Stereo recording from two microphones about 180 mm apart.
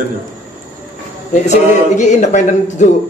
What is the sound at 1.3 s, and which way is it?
Music, 40° left (ahead or behind).